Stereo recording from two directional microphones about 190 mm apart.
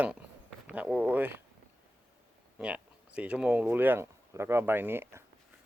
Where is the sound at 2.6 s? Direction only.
5° right (ahead or behind).